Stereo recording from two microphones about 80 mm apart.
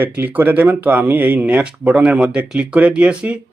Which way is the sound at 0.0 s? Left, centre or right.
Right.